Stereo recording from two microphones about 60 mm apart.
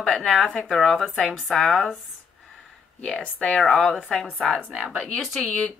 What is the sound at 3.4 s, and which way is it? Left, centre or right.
Speech, centre.